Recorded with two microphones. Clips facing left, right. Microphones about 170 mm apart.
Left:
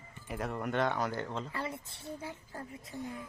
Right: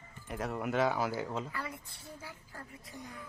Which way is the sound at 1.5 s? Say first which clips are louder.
Left 3 dB; 25° left (ahead or behind).